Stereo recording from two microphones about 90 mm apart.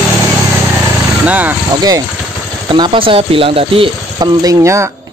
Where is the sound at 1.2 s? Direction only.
20° right (ahead or behind).